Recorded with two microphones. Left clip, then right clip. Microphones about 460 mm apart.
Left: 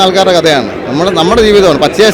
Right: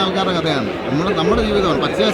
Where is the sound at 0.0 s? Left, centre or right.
Left.